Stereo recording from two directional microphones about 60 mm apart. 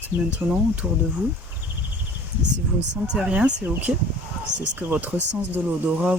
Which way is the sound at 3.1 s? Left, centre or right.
Centre.